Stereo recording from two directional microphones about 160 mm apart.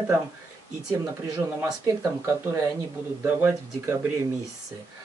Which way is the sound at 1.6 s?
15° right (ahead or behind).